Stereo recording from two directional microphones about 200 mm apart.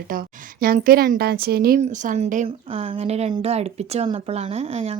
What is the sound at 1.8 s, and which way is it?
A woman's voice, 35° right (ahead or behind).